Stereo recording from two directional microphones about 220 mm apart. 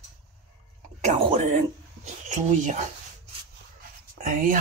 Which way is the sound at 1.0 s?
25° right (ahead or behind).